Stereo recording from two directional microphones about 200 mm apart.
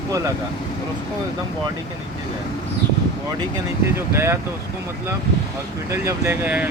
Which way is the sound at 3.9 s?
15° right (ahead or behind).